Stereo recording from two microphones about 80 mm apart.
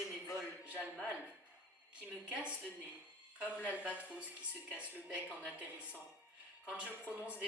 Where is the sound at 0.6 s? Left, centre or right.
Centre.